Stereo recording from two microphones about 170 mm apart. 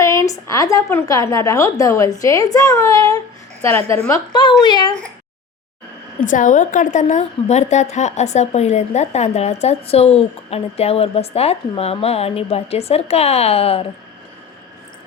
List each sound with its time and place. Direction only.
0.0 s a woman's voice: 15° left (ahead or behind)
6.1 s a woman's voice: 50° left (ahead or behind)